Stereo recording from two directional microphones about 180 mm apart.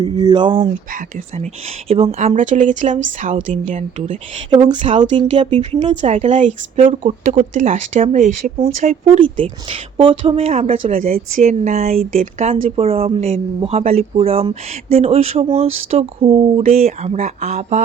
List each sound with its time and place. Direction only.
0.0 s speech: 20° right (ahead or behind)
0.9 s a woman's voice: 50° right (ahead or behind)
1.9 s a woman's voice: 35° right (ahead or behind)
10.9 s a woman's voice: 50° right (ahead or behind)